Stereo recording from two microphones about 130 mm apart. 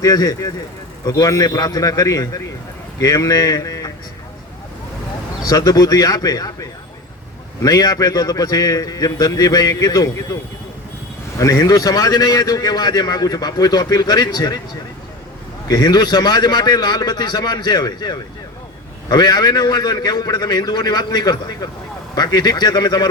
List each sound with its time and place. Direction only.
0.0 s a man's voice: 30° left (ahead or behind)
5.5 s a man's voice: 30° left (ahead or behind)
11.3 s a man's voice: 25° left (ahead or behind)
15.6 s a man's voice: 30° left (ahead or behind)